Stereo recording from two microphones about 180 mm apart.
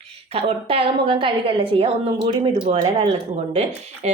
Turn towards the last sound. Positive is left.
turn(degrees=-35)  # may be behind; listen again after turning